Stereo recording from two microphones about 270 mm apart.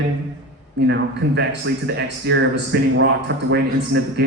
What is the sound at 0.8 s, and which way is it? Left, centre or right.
A man's voice, right.